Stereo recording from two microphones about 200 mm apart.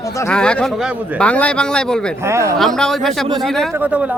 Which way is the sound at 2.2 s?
15° right (ahead or behind).